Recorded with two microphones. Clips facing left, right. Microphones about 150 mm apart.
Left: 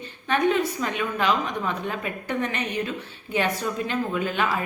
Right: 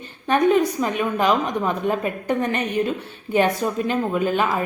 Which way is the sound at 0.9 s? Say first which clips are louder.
Right 4 dB; 45° right (ahead or behind).